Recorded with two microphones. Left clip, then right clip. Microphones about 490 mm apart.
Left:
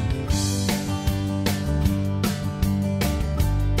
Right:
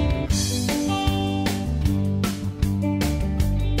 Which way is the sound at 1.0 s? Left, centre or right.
Centre.